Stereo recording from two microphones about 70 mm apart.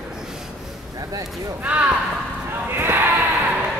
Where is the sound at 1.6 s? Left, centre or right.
Right.